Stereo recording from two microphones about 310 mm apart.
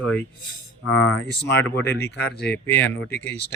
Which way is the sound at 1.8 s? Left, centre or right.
Left.